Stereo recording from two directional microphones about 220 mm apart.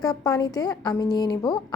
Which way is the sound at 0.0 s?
15° left (ahead or behind).